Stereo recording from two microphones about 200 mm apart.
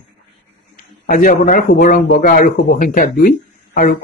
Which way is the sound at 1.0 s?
45° left (ahead or behind).